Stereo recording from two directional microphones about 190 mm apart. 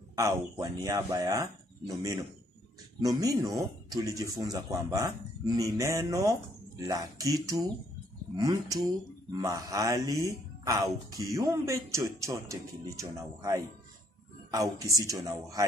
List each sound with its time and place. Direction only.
0.1 s speech: 15° right (ahead or behind)